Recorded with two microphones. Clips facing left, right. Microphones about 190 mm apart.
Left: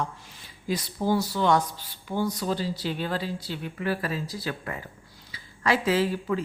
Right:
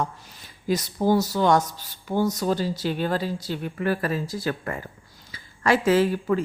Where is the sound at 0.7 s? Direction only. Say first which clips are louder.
Right 4 dB; 45° right (ahead or behind).